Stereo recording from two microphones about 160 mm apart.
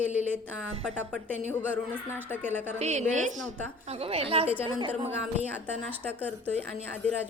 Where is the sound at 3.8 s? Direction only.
40° right (ahead or behind).